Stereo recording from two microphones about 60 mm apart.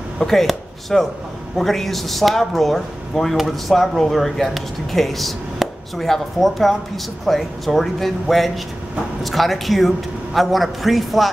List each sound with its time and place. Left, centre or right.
0.2 s speech: centre